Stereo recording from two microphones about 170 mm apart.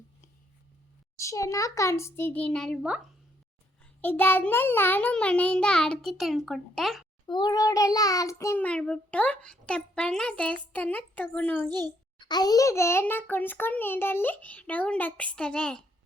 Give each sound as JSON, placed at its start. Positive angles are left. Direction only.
{"t": 1.2, "sound": "child singing", "side_deg": 20}
{"t": 4.0, "sound": "child singing", "side_deg": 10}
{"t": 7.3, "sound": "child singing", "side_deg": 25}
{"t": 12.2, "sound": "child singing", "side_deg": 25}